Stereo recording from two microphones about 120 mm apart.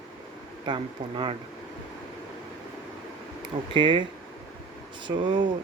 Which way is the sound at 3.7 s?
45° right (ahead or behind).